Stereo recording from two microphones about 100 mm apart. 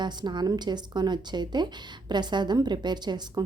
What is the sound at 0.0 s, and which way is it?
A woman's voice, 50° right (ahead or behind).